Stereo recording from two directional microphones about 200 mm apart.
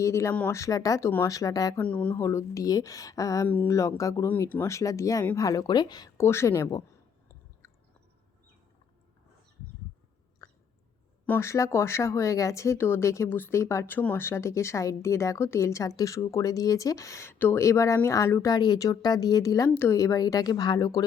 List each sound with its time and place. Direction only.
0.0 s speech: 15° left (ahead or behind)
10.4 s a sound: 15° left (ahead or behind)
11.3 s speech: 15° left (ahead or behind)